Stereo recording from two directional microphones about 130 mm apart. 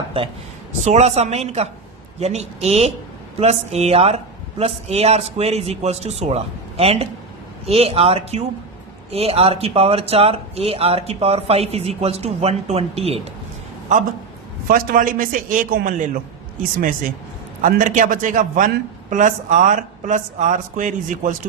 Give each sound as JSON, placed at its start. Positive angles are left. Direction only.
{"t": 0.1, "sound": "a man's voice", "side_deg": -45}
{"t": 0.9, "sound": "a man's voice", "side_deg": -60}
{"t": 14.7, "sound": "a man's voice", "side_deg": -90}
{"t": 17.6, "sound": "speech", "side_deg": -90}